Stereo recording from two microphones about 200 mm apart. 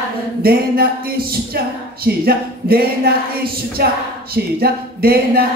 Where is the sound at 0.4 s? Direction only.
50° right (ahead or behind).